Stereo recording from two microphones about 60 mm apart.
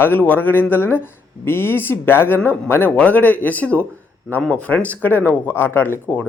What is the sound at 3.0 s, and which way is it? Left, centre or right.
A woman's voice, left.